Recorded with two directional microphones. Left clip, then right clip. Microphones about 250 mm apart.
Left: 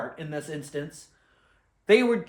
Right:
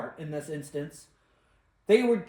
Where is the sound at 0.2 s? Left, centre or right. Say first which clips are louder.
Left 1 dB; centre.